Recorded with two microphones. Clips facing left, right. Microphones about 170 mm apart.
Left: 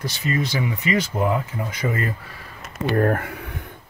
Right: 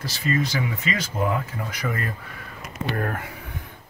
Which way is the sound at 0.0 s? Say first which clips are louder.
Even; 20° left (ahead or behind).